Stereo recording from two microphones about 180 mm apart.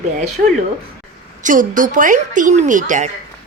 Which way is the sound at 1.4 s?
45° right (ahead or behind).